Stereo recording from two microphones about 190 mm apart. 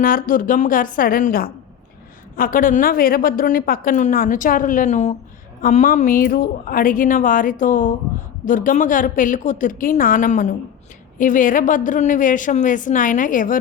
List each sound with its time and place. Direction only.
0.0 s a woman's voice: 45° left (ahead or behind)